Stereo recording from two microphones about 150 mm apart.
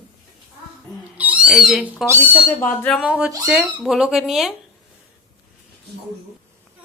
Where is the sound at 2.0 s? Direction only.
15° right (ahead or behind).